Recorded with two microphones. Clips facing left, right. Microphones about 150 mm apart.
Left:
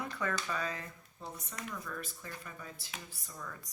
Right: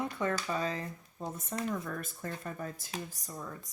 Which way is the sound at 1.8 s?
50° right (ahead or behind).